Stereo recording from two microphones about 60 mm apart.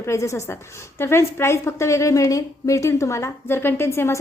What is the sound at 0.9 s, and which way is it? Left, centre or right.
A woman's voice, left.